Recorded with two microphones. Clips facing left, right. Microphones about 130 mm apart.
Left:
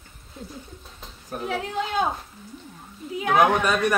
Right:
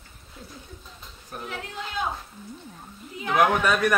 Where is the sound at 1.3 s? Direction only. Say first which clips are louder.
Left 6 dB; 40° left (ahead or behind).